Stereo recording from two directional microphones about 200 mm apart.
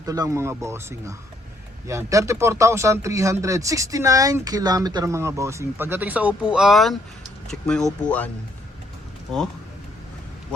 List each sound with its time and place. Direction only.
0.0 s speech: 15° right (ahead or behind); by 8.3 s 5° left (ahead or behind)